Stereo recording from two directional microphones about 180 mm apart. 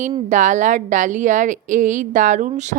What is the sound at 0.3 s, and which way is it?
A woman's voice, 45° right (ahead or behind).